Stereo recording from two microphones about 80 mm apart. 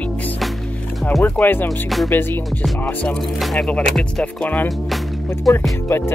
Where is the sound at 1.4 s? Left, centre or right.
Left.